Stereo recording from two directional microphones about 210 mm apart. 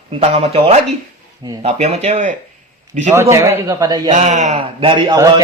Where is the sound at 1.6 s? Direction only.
30° right (ahead or behind).